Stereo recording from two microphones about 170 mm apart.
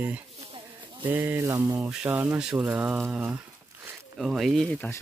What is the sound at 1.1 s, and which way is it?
Speech, 10° right (ahead or behind).